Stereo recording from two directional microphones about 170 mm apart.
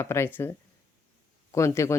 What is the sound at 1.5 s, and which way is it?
Speech, 15° left (ahead or behind).